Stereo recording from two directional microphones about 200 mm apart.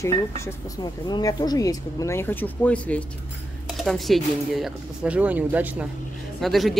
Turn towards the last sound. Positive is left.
turn(degrees=0)  # may be behind; listen again after turning